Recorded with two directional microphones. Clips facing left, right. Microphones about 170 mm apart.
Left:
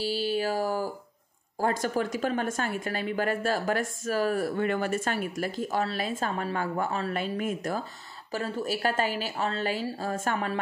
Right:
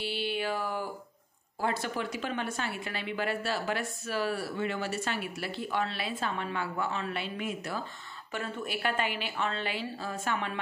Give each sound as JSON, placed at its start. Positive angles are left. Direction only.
{"t": 0.0, "sound": "mantra", "side_deg": 40}
{"t": 1.6, "sound": "a woman's voice", "side_deg": 45}
{"t": 8.3, "sound": "a woman's voice", "side_deg": 35}